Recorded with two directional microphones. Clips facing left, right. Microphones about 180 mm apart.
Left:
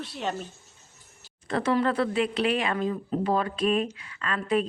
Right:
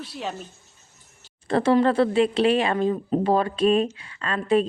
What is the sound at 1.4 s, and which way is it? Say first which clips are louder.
Speech: right 6 dB; 30° right (ahead or behind).